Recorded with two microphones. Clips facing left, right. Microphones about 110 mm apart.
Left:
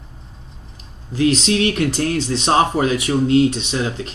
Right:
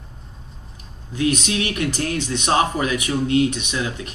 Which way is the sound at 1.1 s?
30° left (ahead or behind).